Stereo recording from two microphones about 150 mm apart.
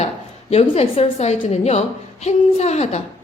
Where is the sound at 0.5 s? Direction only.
40° left (ahead or behind).